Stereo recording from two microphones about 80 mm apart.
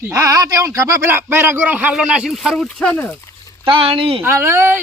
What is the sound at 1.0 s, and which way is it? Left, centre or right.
Speech, right.